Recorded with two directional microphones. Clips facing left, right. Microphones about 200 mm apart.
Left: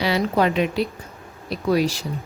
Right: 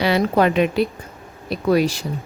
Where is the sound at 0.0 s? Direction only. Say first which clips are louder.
Right 3 dB; 55° right (ahead or behind).